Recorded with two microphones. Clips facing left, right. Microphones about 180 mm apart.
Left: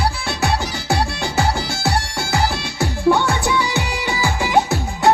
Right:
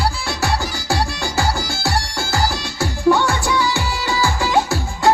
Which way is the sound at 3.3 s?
20° left (ahead or behind).